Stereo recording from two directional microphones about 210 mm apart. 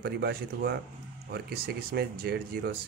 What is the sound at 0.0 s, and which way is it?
Speech, 50° right (ahead or behind).